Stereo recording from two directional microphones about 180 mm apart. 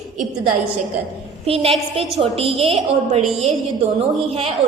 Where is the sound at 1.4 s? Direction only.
35° right (ahead or behind).